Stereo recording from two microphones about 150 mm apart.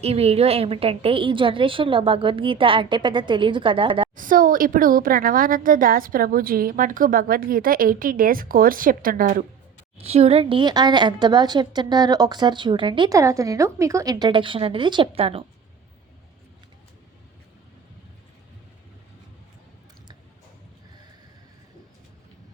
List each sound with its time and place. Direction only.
0.0 s a woman's voice: 40° right (ahead or behind)
4.1 s a woman's voice: 65° right (ahead or behind)
10.0 s a woman's voice: 40° right (ahead or behind)
13.1 s a woman's voice: 20° right (ahead or behind); by 15.4 s 40° right (ahead or behind)